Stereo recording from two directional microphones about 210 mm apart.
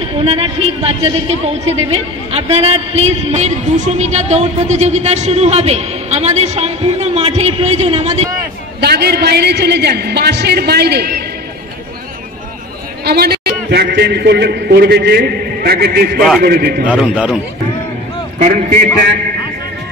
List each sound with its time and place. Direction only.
0.2 s a man's voice: 30° right (ahead or behind)
8.8 s a man's voice: 50° right (ahead or behind)
13.0 s a man's voice: 50° right (ahead or behind)
16.8 s a man's voice: 5° right (ahead or behind)
18.4 s a man's voice: 40° right (ahead or behind)